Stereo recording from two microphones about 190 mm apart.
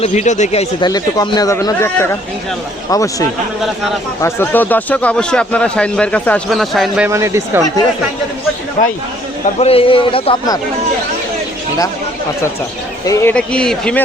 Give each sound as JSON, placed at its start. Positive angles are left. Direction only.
{"t": 0.0, "sound": "speech", "side_deg": 40}
{"t": 0.9, "sound": "a man's voice", "side_deg": 20}
{"t": 7.1, "sound": "speech", "side_deg": -15}
{"t": 8.8, "sound": "speech", "side_deg": 45}
{"t": 9.6, "sound": "a man's voice", "side_deg": 30}
{"t": 13.1, "sound": "speech", "side_deg": 15}